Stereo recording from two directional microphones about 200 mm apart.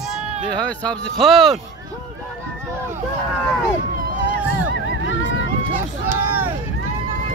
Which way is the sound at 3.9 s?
45° right (ahead or behind).